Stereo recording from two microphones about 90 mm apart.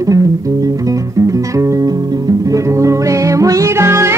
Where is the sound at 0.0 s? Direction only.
40° right (ahead or behind).